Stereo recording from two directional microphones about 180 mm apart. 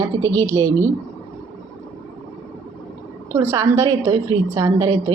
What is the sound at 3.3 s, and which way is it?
A woman's voice, 15° right (ahead or behind).